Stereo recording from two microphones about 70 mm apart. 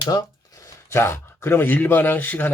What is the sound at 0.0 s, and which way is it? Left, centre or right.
Speech, left.